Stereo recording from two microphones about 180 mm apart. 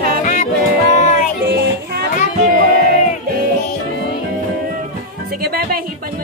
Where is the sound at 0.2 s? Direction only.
45° left (ahead or behind).